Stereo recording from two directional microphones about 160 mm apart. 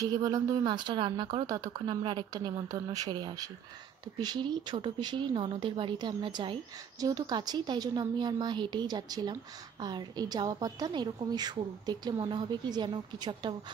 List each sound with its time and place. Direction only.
0.0 s speech: 20° right (ahead or behind)